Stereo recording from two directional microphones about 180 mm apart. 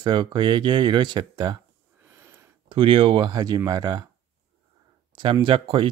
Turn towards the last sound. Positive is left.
turn(degrees=-30)  # may be behind; listen again after turning